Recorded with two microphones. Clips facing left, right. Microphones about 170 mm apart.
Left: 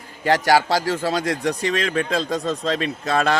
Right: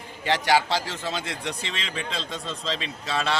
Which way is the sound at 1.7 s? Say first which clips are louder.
Left 11 dB; 55° left (ahead or behind).